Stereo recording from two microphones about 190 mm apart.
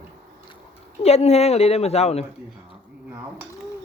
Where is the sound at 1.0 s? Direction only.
35° left (ahead or behind).